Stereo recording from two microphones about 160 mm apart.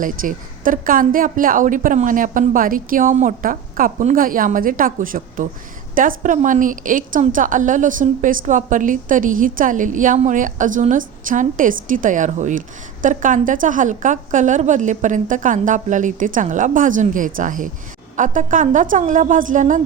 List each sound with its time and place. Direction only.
0.0 s a woman's voice: 60° right (ahead or behind)